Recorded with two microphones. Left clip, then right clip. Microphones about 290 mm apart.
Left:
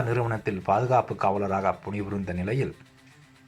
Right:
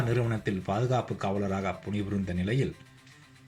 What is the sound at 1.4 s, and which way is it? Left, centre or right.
Speech, left.